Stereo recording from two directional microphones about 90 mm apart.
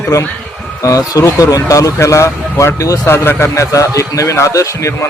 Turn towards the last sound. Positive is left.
turn(degrees=35)  # may be behind; listen again after turning